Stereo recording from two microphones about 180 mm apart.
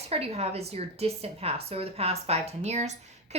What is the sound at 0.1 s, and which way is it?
A woman's voice, 35° right (ahead or behind).